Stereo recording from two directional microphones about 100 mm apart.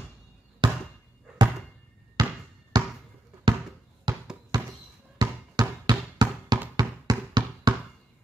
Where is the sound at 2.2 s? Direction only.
40° right (ahead or behind).